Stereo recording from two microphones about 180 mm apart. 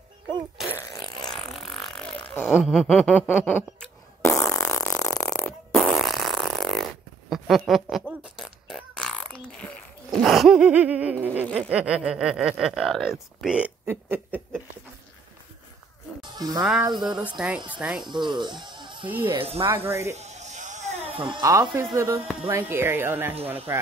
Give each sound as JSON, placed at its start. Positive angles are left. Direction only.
{"t": 0.7, "sound": "fart", "side_deg": 20}
{"t": 1.3, "sound": "a sound", "side_deg": 0}
{"t": 5.3, "sound": "fart", "side_deg": 5}
{"t": 10.2, "sound": "gasp", "side_deg": 0}
{"t": 11.5, "sound": "speech", "side_deg": -5}
{"t": 16.2, "sound": "livestock", "side_deg": -20}
{"t": 16.8, "sound": "speech", "side_deg": -25}
{"t": 17.2, "sound": "speech", "side_deg": -10}
{"t": 18.1, "sound": "speech", "side_deg": -25}
{"t": 19.0, "sound": "speech", "side_deg": -10}
{"t": 19.3, "sound": "speech", "side_deg": -30}
{"t": 19.7, "sound": "speech", "side_deg": -15}
{"t": 20.2, "sound": "a sound", "side_deg": -40}
{"t": 21.2, "sound": "speech", "side_deg": -25}